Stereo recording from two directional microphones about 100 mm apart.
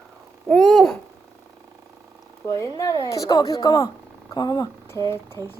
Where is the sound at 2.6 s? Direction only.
35° left (ahead or behind).